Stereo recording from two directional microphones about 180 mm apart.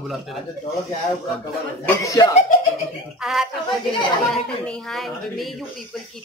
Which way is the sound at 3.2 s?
Centre (ahead or behind).